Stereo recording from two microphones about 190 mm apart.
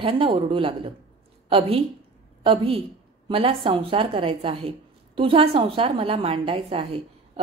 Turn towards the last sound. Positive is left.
turn(degrees=-30)  # may be behind; listen again after turning